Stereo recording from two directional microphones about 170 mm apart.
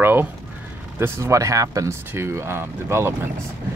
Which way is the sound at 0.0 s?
10° right (ahead or behind).